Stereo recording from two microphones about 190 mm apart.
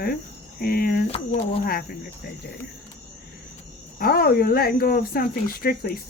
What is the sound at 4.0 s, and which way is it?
Speech, 55° left (ahead or behind).